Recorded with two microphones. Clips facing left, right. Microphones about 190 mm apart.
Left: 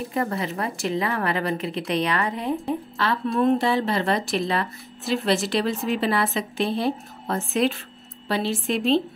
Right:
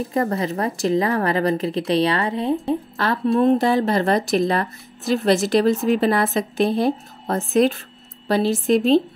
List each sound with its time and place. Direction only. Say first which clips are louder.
0.1 s speech: right 4 dB; 35° right (ahead or behind)
3.0 s speech: right 4 dB; 45° right (ahead or behind)